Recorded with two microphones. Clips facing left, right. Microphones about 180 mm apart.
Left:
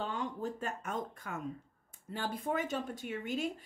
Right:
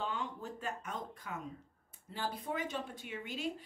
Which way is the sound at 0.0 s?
40° left (ahead or behind).